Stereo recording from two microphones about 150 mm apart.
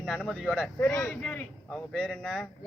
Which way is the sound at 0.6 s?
10° left (ahead or behind).